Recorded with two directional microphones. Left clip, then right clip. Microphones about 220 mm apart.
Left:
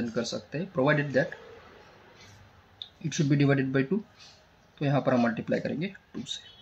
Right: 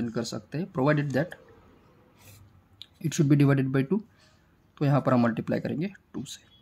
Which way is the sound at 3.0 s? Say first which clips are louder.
Right 2 dB; 30° right (ahead or behind).